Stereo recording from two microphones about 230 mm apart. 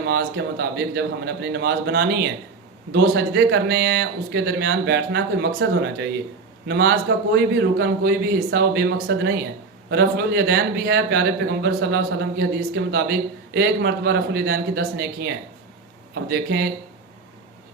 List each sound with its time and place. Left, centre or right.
0.0 s speech: right
16.3 s speech: right